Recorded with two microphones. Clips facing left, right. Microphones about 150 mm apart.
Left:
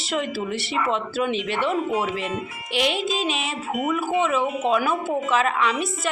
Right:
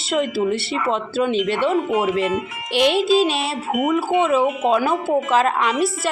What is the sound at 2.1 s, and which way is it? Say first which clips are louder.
Speech: right 8 dB; 90° right.